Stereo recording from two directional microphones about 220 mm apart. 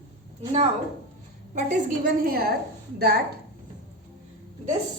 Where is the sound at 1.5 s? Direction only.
40° right (ahead or behind).